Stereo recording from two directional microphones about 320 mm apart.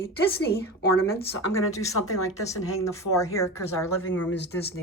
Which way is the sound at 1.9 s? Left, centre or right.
Left.